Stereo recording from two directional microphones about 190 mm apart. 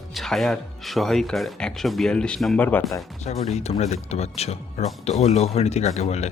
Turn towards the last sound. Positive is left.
turn(degrees=35)  # may be behind; listen again after turning